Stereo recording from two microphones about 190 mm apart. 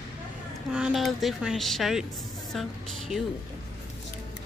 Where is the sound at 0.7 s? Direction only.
5° right (ahead or behind).